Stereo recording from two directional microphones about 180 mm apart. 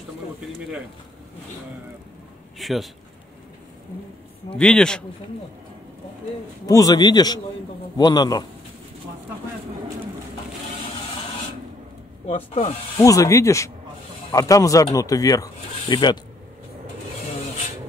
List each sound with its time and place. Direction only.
2.6 s a man's voice: centre (ahead or behind)
4.6 s a man's voice: 5° left (ahead or behind)
6.6 s a man's voice: 20° left (ahead or behind)
12.3 s speech: 35° left (ahead or behind)
12.9 s a man's voice: 20° left (ahead or behind)